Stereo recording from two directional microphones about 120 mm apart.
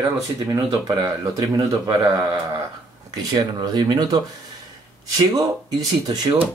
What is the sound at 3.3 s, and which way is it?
Speech, 35° right (ahead or behind).